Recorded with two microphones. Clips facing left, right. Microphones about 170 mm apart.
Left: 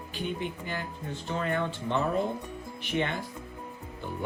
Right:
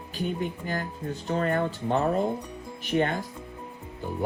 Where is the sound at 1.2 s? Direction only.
40° right (ahead or behind).